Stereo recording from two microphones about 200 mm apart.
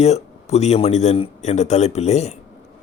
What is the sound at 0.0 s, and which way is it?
A man's voice, 35° left (ahead or behind).